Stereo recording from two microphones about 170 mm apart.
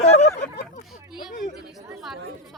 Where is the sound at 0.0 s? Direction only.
40° left (ahead or behind).